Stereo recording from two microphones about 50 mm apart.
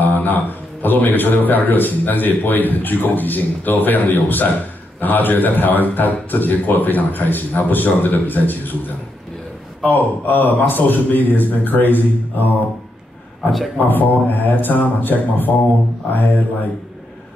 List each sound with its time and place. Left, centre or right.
0.0 s a sound: left
0.8 s a man's voice: left
13.8 s a man's voice: left